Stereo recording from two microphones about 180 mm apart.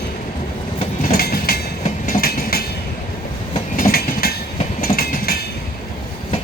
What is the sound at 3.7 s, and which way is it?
Train, 55° left (ahead or behind).